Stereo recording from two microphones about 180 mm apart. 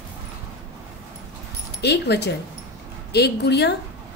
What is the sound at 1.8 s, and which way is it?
Speech, 70° left (ahead or behind).